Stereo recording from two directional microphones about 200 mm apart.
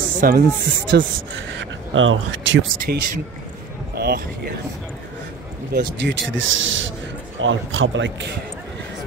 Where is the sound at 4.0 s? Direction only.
50° right (ahead or behind).